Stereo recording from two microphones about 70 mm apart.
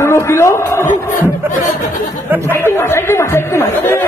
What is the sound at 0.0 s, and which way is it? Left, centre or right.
Speech, left.